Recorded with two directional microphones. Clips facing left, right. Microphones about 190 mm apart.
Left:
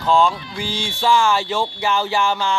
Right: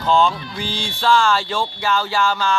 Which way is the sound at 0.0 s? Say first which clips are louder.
Even; 10° left (ahead or behind).